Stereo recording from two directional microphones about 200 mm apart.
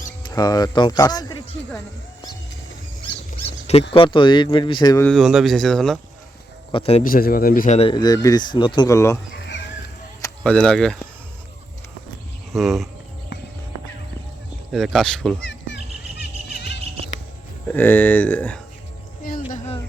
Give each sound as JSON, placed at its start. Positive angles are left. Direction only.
{"t": 0.2, "sound": "speech", "side_deg": 20}
{"t": 3.9, "sound": "speech", "side_deg": 25}
{"t": 5.0, "sound": "speech", "side_deg": 0}
{"t": 6.7, "sound": "speech", "side_deg": 30}
{"t": 7.0, "sound": "speech", "side_deg": 45}
{"t": 7.8, "sound": "speech", "side_deg": 25}
{"t": 9.3, "sound": "a sound", "side_deg": 65}
{"t": 10.4, "sound": "speech", "side_deg": 5}
{"t": 12.5, "sound": "speech", "side_deg": 0}
{"t": 14.7, "sound": "speech", "side_deg": 0}
{"t": 15.4, "sound": "bird", "side_deg": 60}
{"t": 17.7, "sound": "speech", "side_deg": 10}
{"t": 19.5, "sound": "a sound", "side_deg": 35}